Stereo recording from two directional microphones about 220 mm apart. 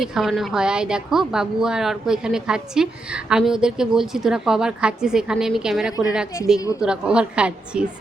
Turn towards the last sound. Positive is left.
turn(degrees=-5)  # may be behind; listen again after turning